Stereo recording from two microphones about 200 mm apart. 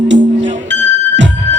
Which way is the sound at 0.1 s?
65° right (ahead or behind).